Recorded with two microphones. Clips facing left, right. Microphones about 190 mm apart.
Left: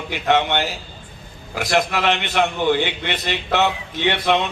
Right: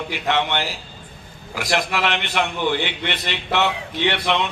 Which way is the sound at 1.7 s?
45° left (ahead or behind).